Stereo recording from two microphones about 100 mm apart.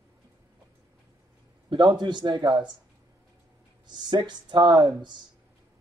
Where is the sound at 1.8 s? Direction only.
45° right (ahead or behind).